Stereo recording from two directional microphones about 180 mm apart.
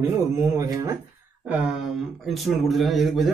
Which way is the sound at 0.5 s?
20° right (ahead or behind).